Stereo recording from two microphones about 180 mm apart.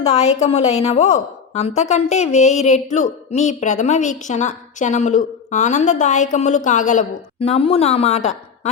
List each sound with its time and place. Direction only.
0.0 s a woman's voice: 40° left (ahead or behind)
7.3 s a woman's voice: 35° left (ahead or behind)